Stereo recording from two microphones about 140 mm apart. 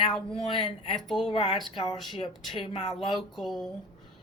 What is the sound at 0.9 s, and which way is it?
Speech, centre (ahead or behind).